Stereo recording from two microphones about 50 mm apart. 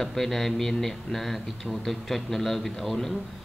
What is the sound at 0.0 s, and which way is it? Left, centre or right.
Speech, centre.